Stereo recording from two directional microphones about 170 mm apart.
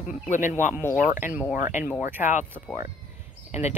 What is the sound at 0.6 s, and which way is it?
Speech, 15° right (ahead or behind).